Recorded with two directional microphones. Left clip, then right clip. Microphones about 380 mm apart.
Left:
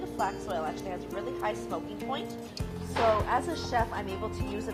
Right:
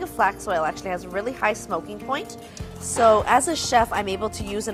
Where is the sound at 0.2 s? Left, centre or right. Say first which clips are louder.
Right 10 dB; right.